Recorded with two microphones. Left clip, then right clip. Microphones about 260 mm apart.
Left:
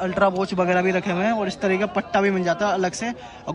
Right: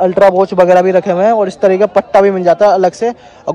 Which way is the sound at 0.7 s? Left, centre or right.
Centre.